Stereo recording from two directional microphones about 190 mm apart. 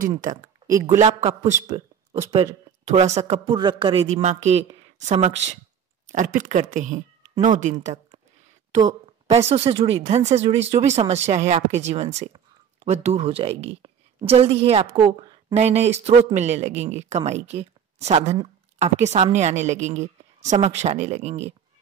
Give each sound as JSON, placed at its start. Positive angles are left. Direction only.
{"t": 0.2, "sound": "speech", "side_deg": -45}
{"t": 0.7, "sound": "speech", "side_deg": -15}
{"t": 1.0, "sound": "a woman's voice", "side_deg": -35}